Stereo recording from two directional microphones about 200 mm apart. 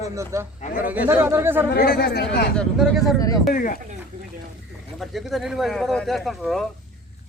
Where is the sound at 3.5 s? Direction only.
45° left (ahead or behind).